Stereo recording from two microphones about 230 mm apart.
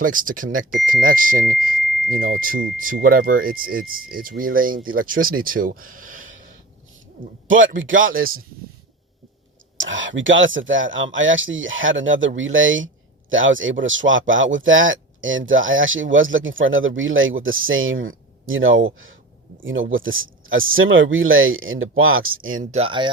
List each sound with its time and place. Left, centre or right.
0.0 s speech: right
7.4 s a man's voice: right
9.7 s speech: right
22.5 s speech: right